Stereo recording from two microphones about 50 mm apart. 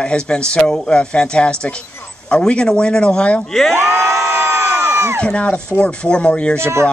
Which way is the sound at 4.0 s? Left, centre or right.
Right.